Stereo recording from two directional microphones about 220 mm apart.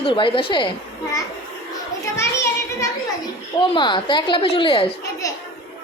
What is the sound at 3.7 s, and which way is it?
A woman's voice, 20° left (ahead or behind).